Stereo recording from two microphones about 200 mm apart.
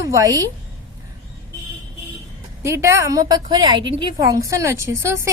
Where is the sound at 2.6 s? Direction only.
15° right (ahead or behind).